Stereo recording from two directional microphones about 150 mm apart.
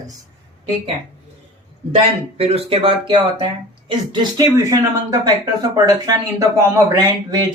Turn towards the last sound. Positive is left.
turn(degrees=-25)  # may be behind; listen again after turning